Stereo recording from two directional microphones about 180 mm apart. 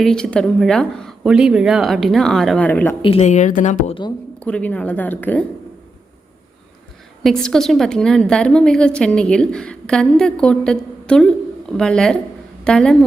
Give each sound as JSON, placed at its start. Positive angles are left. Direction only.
{"t": 0.0, "sound": "a woman's voice", "side_deg": 5}
{"t": 3.0, "sound": "a woman's voice", "side_deg": 35}
{"t": 4.4, "sound": "speech", "side_deg": 5}
{"t": 7.2, "sound": "a woman's voice", "side_deg": 0}